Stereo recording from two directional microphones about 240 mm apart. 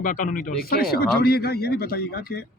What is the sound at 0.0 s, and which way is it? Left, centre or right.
Speech, left.